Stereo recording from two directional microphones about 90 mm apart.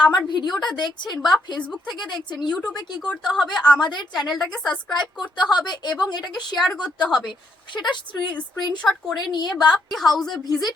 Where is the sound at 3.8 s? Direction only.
55° left (ahead or behind).